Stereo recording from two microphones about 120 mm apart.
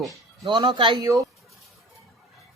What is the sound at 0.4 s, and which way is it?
Speech, 40° right (ahead or behind).